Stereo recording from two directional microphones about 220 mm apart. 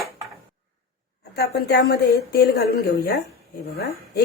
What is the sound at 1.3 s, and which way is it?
A woman's voice, 45° left (ahead or behind).